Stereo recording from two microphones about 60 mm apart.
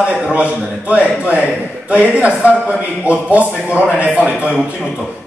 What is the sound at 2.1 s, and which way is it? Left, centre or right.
A man's voice, centre.